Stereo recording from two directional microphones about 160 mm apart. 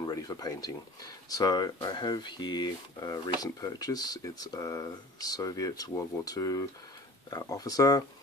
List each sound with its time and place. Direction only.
0.0 s speech: 25° left (ahead or behind)